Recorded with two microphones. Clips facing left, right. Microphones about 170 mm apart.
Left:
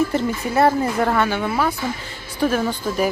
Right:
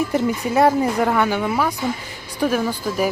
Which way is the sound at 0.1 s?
15° right (ahead or behind).